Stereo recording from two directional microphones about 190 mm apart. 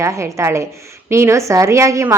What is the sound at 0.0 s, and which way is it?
A woman's voice, 15° right (ahead or behind).